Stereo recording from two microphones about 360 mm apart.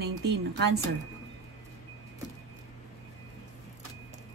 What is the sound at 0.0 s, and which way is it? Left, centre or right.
Speech, right.